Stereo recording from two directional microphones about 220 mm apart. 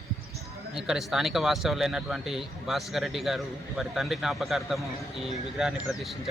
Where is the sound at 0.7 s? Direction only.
Centre (ahead or behind).